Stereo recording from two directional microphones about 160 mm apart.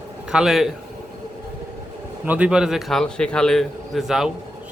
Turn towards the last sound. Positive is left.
turn(degrees=0)  # may be behind; listen again after turning